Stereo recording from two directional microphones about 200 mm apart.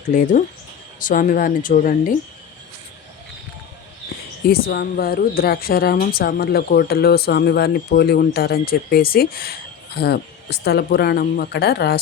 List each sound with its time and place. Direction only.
0.1 s a woman's voice: 40° left (ahead or behind)
4.4 s a woman's voice: 50° left (ahead or behind)